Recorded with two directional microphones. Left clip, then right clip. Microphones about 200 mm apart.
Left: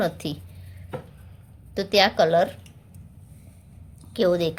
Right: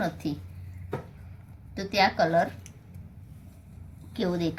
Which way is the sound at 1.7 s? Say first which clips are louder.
Left 5 dB; 50° left (ahead or behind).